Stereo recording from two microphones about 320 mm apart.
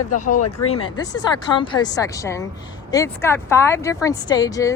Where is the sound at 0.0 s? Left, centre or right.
Left.